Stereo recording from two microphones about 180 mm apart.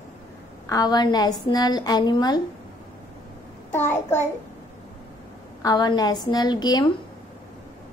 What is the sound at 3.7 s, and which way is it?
Speech, 10° left (ahead or behind).